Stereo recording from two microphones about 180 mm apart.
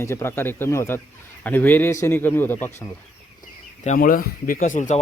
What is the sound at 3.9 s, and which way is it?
Speech, 50° left (ahead or behind).